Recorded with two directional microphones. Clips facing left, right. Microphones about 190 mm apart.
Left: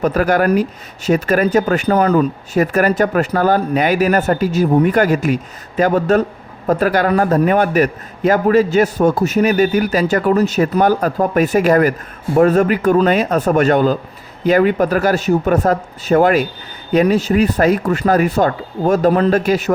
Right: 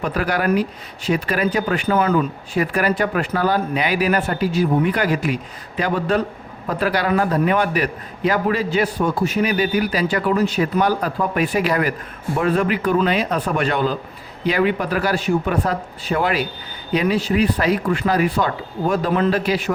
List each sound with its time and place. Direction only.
0.0 s speech: 45° left (ahead or behind)